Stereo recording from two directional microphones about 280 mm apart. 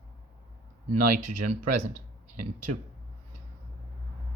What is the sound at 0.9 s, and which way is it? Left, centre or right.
Speech, right.